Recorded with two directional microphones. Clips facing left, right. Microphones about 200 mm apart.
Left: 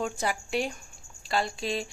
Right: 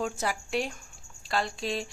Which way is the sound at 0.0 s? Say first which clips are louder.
Left 1 dB; centre (ahead or behind).